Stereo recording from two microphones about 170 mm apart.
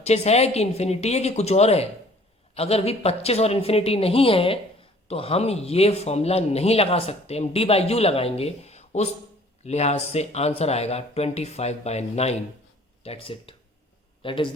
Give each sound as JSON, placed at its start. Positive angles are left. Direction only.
{"t": 0.0, "sound": "speech", "side_deg": 40}